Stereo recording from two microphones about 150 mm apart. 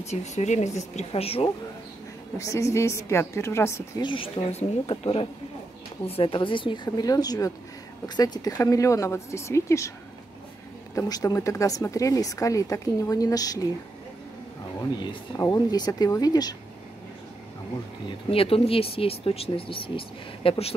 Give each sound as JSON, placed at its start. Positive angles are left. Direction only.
{"t": 0.0, "sound": "a woman's voice", "side_deg": 50}
{"t": 2.3, "sound": "a woman's voice", "side_deg": 20}
{"t": 4.0, "sound": "speech", "side_deg": 35}
{"t": 11.0, "sound": "speech", "side_deg": 25}
{"t": 14.8, "sound": "speech", "side_deg": 20}
{"t": 18.0, "sound": "speech", "side_deg": 40}